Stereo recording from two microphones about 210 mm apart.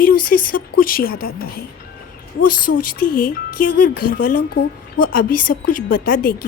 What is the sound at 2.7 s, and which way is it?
Speech, 45° left (ahead or behind).